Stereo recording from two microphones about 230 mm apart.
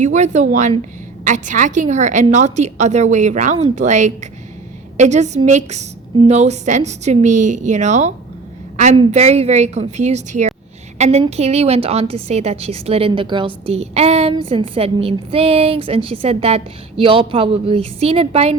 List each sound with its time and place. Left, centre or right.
0.0 s a woman's voice: right
8.7 s a sound: right
9.0 s a woman's voice: right